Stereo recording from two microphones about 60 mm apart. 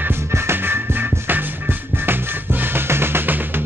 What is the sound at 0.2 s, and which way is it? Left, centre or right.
Music, right.